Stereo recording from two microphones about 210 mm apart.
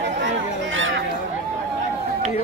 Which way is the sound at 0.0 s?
60° right (ahead or behind).